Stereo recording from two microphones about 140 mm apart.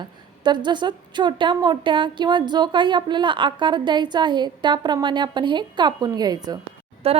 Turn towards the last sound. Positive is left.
turn(degrees=-45)  # may be behind; listen again after turning